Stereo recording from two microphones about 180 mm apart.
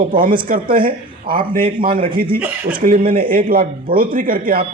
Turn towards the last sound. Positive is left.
turn(degrees=-55)  # may be behind; listen again after turning